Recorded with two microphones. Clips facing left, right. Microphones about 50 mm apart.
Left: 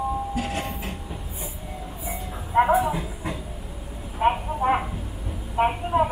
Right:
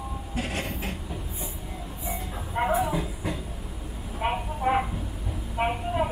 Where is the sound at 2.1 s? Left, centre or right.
Centre.